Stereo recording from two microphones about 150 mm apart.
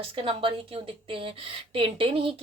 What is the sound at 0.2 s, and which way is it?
Speech, 40° right (ahead or behind).